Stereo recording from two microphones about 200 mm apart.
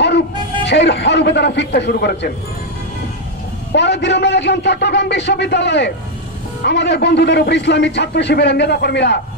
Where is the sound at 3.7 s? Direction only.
60° left (ahead or behind).